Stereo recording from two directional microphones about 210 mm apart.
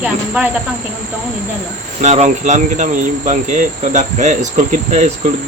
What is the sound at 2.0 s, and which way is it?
Cricket, 35° right (ahead or behind).